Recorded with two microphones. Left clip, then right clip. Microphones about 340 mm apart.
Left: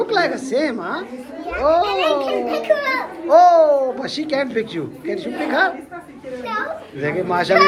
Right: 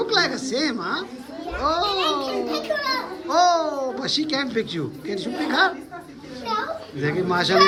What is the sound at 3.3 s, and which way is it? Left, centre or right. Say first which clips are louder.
A child's voice: left 8 dB; centre.